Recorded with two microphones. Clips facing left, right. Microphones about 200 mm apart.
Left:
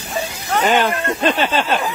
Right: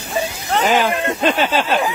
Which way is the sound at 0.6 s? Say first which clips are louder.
Even; centre (ahead or behind).